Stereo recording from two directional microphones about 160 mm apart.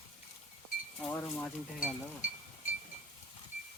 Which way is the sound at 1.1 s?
10° left (ahead or behind).